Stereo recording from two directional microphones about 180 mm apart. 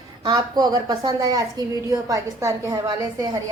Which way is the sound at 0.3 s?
20° right (ahead or behind).